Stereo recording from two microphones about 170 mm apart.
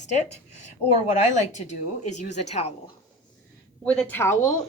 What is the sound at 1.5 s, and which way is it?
A woman's voice, 45° left (ahead or behind).